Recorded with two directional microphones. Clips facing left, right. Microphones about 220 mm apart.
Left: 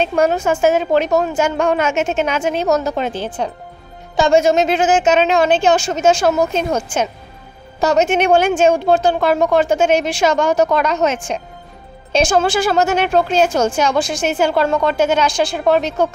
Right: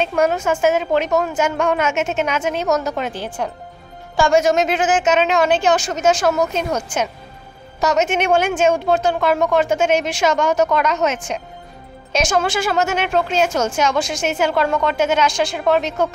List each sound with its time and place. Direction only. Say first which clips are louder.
0.0 s a woman's voice: left 2 dB; 30° left (ahead or behind)